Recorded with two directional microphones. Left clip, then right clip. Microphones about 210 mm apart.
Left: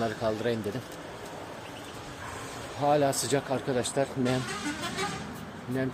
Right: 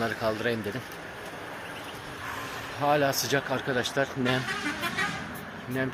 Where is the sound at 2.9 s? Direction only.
5° left (ahead or behind).